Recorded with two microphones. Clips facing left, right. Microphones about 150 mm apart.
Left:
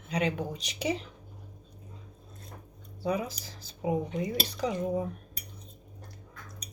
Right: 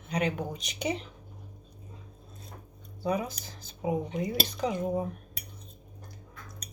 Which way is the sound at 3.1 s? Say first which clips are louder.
Right 1 dB; 30° left (ahead or behind).